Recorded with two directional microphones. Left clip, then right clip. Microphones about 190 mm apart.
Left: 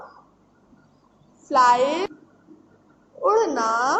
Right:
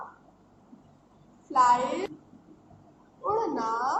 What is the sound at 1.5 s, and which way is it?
Speech, 35° left (ahead or behind).